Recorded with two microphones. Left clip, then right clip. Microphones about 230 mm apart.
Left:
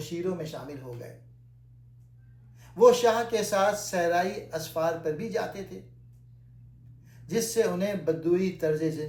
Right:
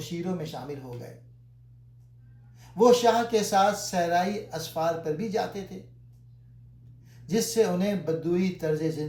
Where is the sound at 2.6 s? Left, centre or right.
Right.